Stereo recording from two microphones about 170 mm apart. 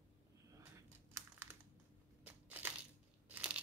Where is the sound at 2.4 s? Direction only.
10° right (ahead or behind).